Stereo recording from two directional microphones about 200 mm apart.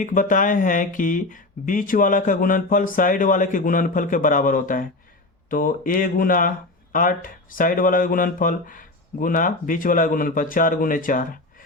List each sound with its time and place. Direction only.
0.0 s speech: 40° left (ahead or behind)